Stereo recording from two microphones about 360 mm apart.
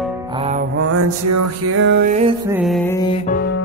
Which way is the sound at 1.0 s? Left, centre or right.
Right.